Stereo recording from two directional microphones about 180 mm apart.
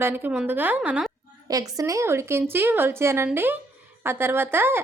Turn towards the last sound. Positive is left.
turn(degrees=-10)  # may be behind; listen again after turning